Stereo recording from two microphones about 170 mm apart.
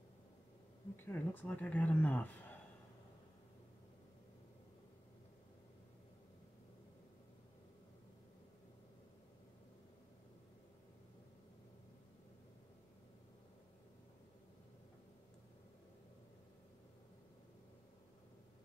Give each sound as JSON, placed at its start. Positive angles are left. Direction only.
{"t": 0.9, "sound": "a man's voice", "side_deg": 10}